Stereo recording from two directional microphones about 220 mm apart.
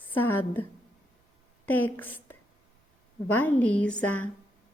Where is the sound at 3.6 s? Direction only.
5° left (ahead or behind).